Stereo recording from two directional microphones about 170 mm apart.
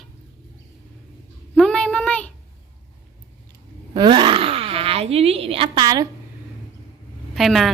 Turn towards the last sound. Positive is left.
turn(degrees=0)  # may be behind; listen again after turning